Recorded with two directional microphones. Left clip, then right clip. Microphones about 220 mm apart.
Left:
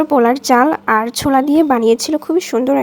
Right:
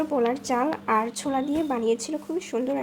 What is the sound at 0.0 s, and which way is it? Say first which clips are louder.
Speech: left 12 dB; 35° left (ahead or behind).